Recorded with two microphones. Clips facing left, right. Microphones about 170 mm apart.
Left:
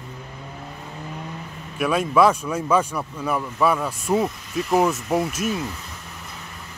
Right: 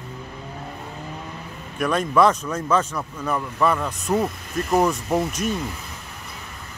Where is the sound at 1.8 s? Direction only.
5° left (ahead or behind).